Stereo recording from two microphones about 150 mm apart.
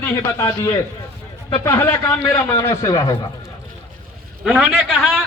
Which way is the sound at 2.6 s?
20° left (ahead or behind).